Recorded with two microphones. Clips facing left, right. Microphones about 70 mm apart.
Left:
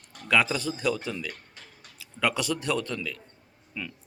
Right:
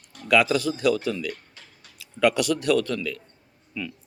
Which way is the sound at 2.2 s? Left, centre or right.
Left.